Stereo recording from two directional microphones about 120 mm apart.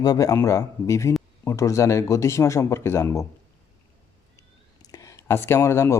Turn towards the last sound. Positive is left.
turn(degrees=25)  # may be behind; listen again after turning